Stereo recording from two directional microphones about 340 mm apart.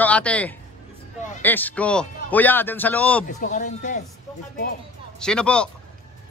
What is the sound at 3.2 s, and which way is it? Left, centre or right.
Speech, left.